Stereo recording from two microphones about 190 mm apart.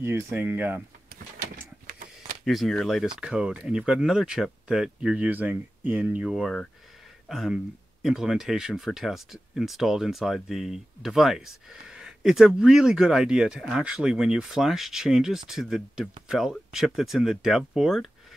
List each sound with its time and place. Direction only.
0.0 s speech: 10° right (ahead or behind)
1.4 s a sound: 50° right (ahead or behind)
2.4 s speech: centre (ahead or behind)